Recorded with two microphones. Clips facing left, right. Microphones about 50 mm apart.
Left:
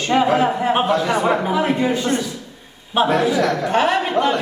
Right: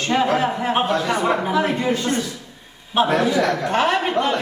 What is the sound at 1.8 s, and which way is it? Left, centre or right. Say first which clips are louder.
Speech: left 2 dB; centre.